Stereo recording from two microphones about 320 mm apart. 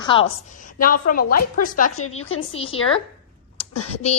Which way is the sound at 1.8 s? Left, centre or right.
Left.